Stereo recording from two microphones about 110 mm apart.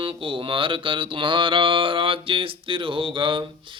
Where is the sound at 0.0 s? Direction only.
55° right (ahead or behind).